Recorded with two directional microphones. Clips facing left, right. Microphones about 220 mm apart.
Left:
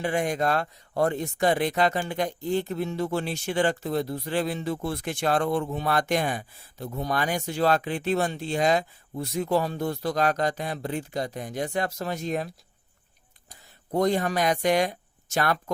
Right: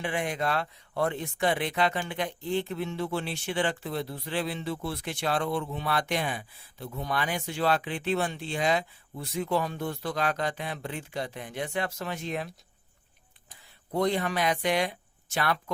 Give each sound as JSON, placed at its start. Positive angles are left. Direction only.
{"t": 0.0, "sound": "speech", "side_deg": 40}
{"t": 13.9, "sound": "speech", "side_deg": 45}